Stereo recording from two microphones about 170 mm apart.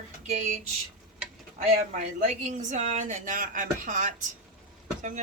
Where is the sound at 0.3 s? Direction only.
45° right (ahead or behind).